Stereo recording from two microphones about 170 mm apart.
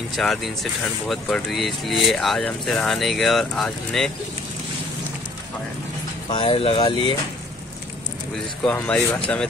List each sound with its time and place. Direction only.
0.2 s speech: centre (ahead or behind)
6.3 s speech: 30° left (ahead or behind)
8.6 s speech: 10° left (ahead or behind)